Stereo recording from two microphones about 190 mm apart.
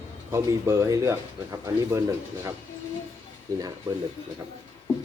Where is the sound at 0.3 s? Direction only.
15° right (ahead or behind).